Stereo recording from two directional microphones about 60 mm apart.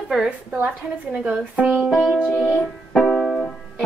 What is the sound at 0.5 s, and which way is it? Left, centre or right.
A woman's voice, right.